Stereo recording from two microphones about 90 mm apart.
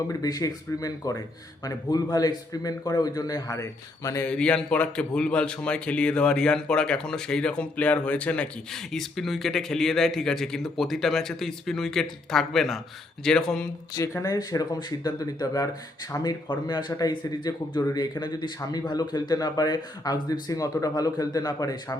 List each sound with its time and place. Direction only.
0.1 s speech: 45° left (ahead or behind)
4.3 s a man's voice: 10° left (ahead or behind)
8.9 s a man's voice: centre (ahead or behind)
14.2 s speech: 40° left (ahead or behind)
16.5 s speech: 55° left (ahead or behind)